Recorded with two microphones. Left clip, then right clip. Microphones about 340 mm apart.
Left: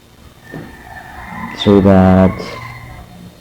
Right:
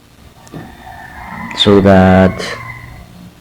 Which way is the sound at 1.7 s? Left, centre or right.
Right.